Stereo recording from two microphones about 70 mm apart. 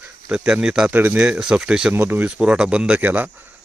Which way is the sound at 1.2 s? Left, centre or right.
Centre.